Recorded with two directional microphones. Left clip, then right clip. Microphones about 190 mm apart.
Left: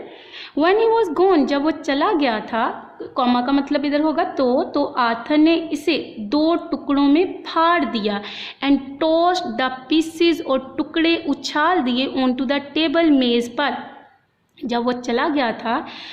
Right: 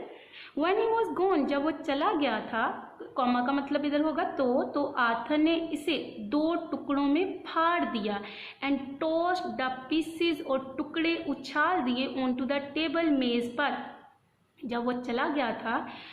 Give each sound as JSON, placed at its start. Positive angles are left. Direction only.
{"t": 0.6, "sound": "a woman's voice", "side_deg": 45}